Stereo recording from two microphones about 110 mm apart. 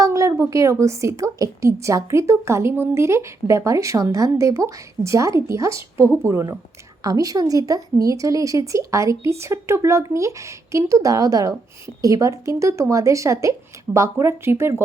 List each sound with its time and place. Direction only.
0.0 s a woman's voice: 30° right (ahead or behind)